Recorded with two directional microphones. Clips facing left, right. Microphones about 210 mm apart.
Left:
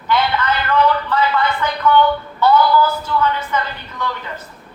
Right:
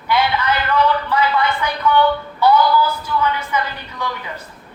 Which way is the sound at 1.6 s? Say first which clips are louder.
Left 1 dB; 10° right (ahead or behind).